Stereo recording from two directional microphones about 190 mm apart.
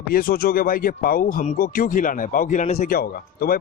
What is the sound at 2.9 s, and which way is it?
Speech, 50° left (ahead or behind).